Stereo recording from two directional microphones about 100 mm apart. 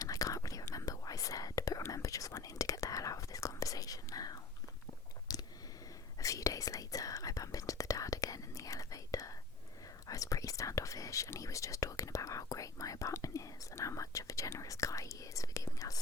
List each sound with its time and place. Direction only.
0.0 s whispering: 35° left (ahead or behind)
5.3 s a sound: 40° left (ahead or behind)
6.1 s whispering: 35° left (ahead or behind)